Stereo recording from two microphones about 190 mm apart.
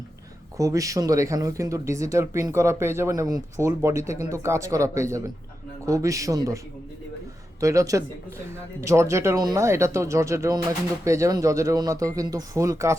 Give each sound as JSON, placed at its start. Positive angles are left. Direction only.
{"t": 0.5, "sound": "speech", "side_deg": -15}
{"t": 7.6, "sound": "speech", "side_deg": -15}